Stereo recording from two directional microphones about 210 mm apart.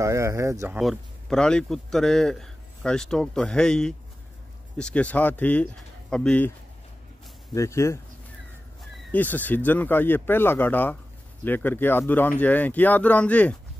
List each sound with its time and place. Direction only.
0.0 s speech: 15° right (ahead or behind)
0.7 s a man's voice: centre (ahead or behind)
7.5 s speech: 15° left (ahead or behind)
9.1 s speech: 10° left (ahead or behind)